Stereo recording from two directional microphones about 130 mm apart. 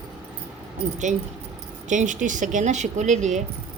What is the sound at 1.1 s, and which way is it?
A man's voice, 70° right (ahead or behind).